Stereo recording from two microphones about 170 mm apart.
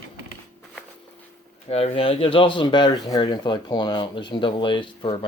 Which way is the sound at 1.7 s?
35° left (ahead or behind).